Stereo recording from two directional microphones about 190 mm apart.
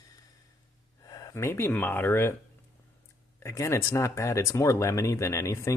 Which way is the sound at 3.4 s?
15° left (ahead or behind).